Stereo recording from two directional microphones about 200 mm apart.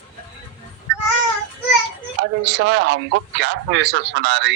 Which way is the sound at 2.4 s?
65° right (ahead or behind).